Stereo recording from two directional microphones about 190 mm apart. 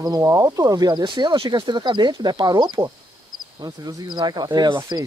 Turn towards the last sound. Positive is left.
turn(degrees=-20)  # may be behind; listen again after turning